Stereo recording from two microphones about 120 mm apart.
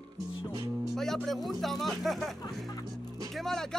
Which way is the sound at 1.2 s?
Centre (ahead or behind).